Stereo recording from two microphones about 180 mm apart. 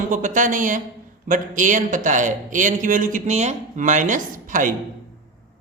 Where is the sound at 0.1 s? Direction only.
45° right (ahead or behind).